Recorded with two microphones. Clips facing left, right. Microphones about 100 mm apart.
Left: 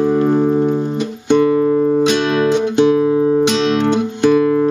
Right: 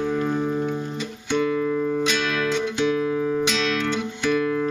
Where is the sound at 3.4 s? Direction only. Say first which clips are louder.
Left 9 dB; 60° left (ahead or behind).